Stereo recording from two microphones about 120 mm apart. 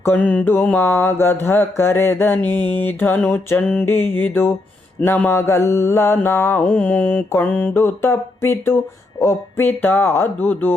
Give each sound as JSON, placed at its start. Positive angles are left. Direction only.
{"t": 0.0, "sound": "mantra", "side_deg": 15}